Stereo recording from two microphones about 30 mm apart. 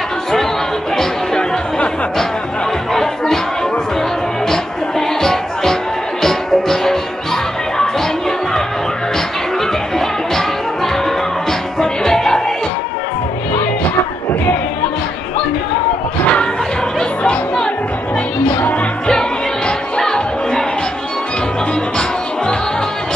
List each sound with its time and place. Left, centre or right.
2.9 s music: centre
5.2 s music: centre
11.8 s music: centre
18.5 s music: left
20.0 s music: centre